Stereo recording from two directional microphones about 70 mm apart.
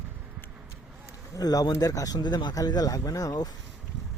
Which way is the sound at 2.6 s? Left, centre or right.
Left.